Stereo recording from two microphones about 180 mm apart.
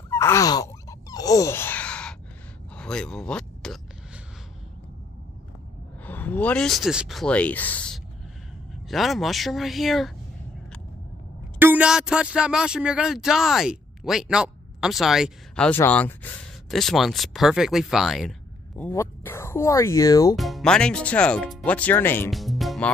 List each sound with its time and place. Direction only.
0.1 s a sound: 15° left (ahead or behind)
6.0 s speech: 10° left (ahead or behind)
11.6 s speech: 10° right (ahead or behind)
18.8 s speech: 10° left (ahead or behind)
20.3 s speech: centre (ahead or behind)
22.3 s music: centre (ahead or behind)